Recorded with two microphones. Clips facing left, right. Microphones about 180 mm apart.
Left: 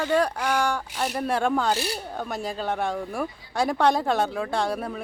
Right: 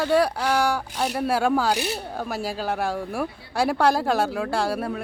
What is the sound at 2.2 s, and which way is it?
Speech, 5° right (ahead or behind).